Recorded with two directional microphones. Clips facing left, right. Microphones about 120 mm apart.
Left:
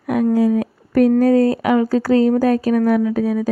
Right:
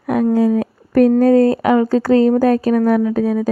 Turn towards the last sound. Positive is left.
turn(degrees=-35)  # may be behind; listen again after turning